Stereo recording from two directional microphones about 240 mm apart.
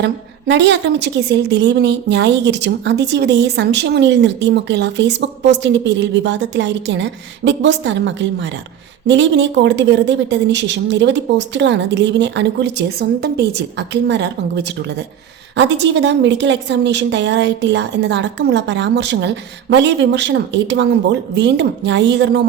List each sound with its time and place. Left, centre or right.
0.0 s a woman's voice: right